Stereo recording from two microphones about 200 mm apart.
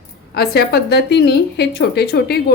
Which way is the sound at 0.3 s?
50° left (ahead or behind).